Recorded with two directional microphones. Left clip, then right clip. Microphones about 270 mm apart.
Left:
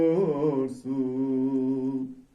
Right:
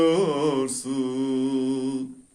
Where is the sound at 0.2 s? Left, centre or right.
Right.